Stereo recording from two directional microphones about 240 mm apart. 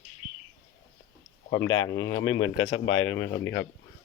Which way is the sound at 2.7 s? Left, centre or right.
Left.